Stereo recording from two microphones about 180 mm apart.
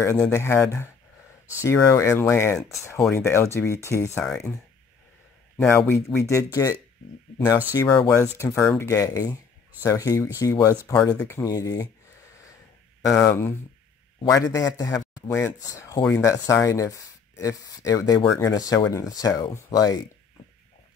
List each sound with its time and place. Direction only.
0.3 s speech: 15° left (ahead or behind)
4.2 s speech: 5° left (ahead or behind)
5.7 s speech: 15° left (ahead or behind)
7.9 s speech: 5° left (ahead or behind)
8.2 s speech: 15° left (ahead or behind)
13.2 s speech: 15° left (ahead or behind)